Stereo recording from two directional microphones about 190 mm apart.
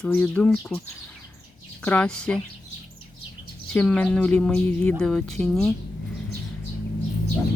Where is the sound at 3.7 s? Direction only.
5° left (ahead or behind).